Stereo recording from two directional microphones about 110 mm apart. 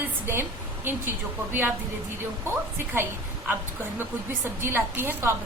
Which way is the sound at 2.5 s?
20° right (ahead or behind).